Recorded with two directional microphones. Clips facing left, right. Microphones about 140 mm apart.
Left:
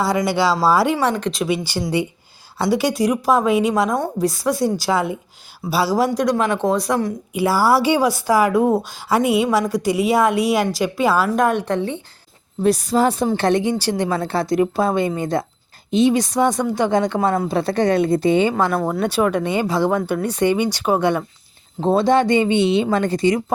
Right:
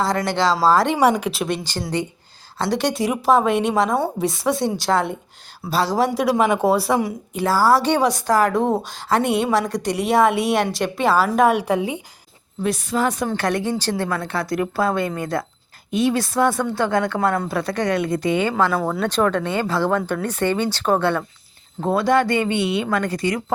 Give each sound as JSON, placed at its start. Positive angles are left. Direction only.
{"t": 0.0, "sound": "speech", "side_deg": 5}
{"t": 0.9, "sound": "speech", "side_deg": -10}
{"t": 6.1, "sound": "speech", "side_deg": -10}
{"t": 7.3, "sound": "speech", "side_deg": 10}
{"t": 12.6, "sound": "a woman's voice", "side_deg": 35}
{"t": 14.2, "sound": "speech", "side_deg": 30}
{"t": 17.5, "sound": "speech", "side_deg": 30}
{"t": 18.9, "sound": "speech", "side_deg": 10}
{"t": 21.8, "sound": "speech", "side_deg": 25}